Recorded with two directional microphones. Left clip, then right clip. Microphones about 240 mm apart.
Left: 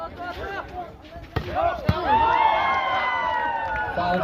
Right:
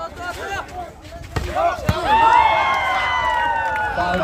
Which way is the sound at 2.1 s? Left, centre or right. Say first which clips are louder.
Right 6 dB; right.